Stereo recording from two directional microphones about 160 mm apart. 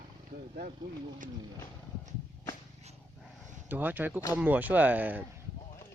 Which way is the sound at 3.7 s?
10° right (ahead or behind).